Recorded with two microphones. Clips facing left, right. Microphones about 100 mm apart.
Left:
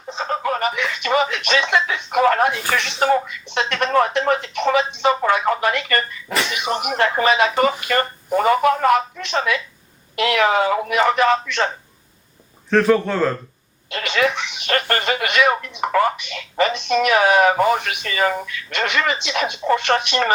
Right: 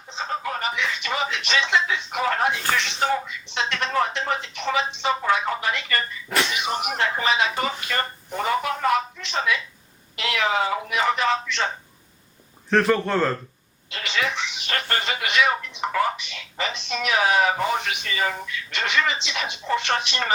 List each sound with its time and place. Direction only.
0.1 s speech: 60° left (ahead or behind)
12.7 s speech: centre (ahead or behind)
13.9 s speech: 60° left (ahead or behind)